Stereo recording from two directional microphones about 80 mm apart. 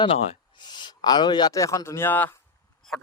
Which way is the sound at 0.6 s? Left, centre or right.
Left.